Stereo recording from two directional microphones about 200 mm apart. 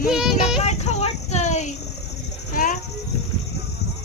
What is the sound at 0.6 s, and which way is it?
Child singing, 35° left (ahead or behind).